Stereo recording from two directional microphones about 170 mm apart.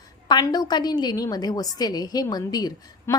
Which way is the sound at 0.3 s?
25° left (ahead or behind).